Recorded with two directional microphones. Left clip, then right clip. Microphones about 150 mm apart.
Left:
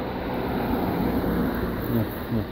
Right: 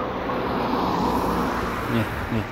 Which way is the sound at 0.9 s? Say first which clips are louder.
Right 4 dB; 45° left (ahead or behind).